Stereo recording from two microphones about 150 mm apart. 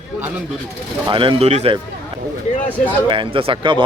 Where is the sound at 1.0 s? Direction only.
35° right (ahead or behind).